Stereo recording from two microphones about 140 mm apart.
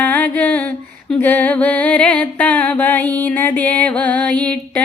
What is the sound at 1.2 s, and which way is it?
Music, 10° left (ahead or behind).